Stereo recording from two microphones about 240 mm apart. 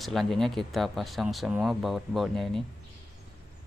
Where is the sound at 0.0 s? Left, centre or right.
Centre.